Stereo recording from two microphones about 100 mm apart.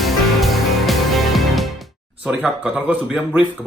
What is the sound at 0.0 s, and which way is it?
Music, centre (ahead or behind).